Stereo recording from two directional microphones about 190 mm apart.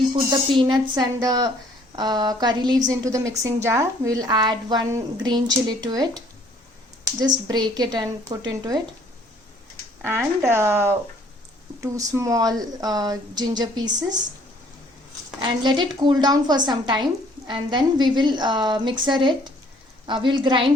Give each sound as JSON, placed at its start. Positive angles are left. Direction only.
{"t": 0.3, "sound": "a woman's voice", "side_deg": -25}
{"t": 10.0, "sound": "speech", "side_deg": -10}
{"t": 11.9, "sound": "a woman's voice", "side_deg": -15}
{"t": 15.4, "sound": "a woman's voice", "side_deg": -25}